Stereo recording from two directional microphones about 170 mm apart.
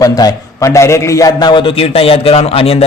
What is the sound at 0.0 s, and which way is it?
A man's voice, 20° left (ahead or behind).